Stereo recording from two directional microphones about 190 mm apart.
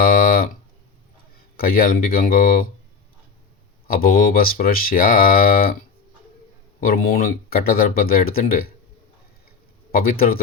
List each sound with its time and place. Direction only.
0.0 s a sound: 50° left (ahead or behind)
1.5 s speech: 50° left (ahead or behind)
3.8 s speech: 50° left (ahead or behind)
6.7 s speech: 50° left (ahead or behind)
9.9 s speech: 50° left (ahead or behind)